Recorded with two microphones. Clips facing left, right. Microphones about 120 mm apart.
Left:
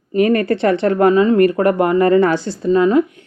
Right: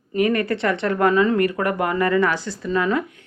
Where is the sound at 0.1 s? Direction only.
30° left (ahead or behind).